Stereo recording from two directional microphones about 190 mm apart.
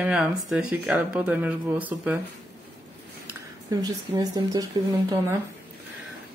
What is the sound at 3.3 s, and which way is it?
Speech, 20° right (ahead or behind).